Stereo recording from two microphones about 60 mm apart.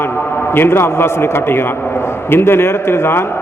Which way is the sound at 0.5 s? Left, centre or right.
Left.